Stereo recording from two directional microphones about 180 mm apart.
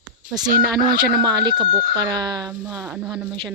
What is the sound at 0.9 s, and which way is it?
Speech, 60° right (ahead or behind).